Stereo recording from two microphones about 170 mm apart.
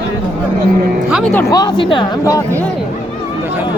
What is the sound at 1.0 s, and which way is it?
Speech, centre (ahead or behind).